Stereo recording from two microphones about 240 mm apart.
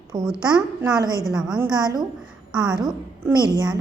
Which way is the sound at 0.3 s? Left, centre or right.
Centre.